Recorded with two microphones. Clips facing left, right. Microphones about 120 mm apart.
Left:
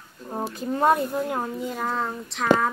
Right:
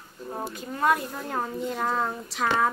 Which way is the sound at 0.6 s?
30° left (ahead or behind).